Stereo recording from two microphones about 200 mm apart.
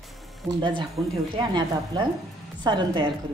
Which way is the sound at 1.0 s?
20° right (ahead or behind).